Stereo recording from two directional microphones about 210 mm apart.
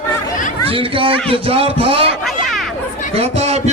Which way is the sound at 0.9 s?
25° right (ahead or behind).